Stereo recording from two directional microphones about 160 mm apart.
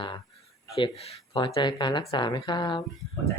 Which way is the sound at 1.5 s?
30° left (ahead or behind).